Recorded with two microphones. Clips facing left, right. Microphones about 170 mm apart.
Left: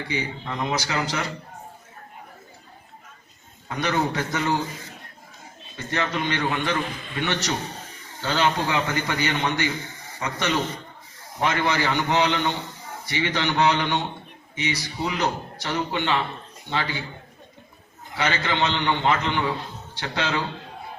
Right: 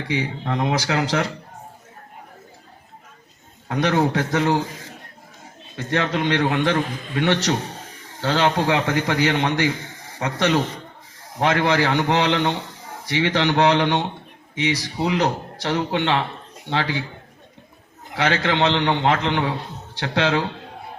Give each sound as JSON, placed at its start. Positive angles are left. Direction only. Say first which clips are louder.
{"t": 0.1, "sound": "speech", "louder": "right 7 dB", "side_deg": -80}
{"t": 3.7, "sound": "speech", "louder": "right 5 dB", "side_deg": -85}
{"t": 5.7, "sound": "a man's voice", "louder": "right 4 dB", "side_deg": -85}
{"t": 18.1, "sound": "a man's voice", "louder": "right 4 dB", "side_deg": -90}